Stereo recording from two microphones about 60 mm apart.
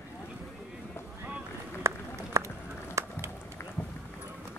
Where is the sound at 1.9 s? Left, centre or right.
Right.